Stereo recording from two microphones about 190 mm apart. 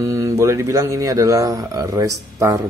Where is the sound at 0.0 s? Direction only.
15° right (ahead or behind).